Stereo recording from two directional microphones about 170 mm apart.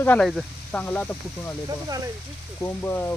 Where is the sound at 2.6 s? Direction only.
15° left (ahead or behind).